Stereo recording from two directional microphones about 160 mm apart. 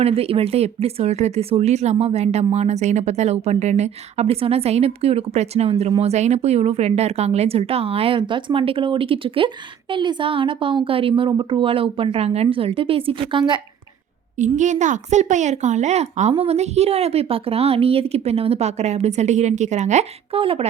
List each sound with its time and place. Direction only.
0.0 s speech: 40° right (ahead or behind)
14.3 s speech: 50° right (ahead or behind)